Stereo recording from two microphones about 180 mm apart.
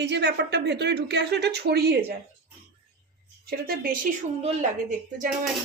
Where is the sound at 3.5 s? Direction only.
55° right (ahead or behind).